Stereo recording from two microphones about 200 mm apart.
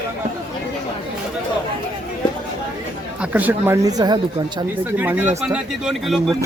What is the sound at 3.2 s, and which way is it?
Speech, 10° right (ahead or behind).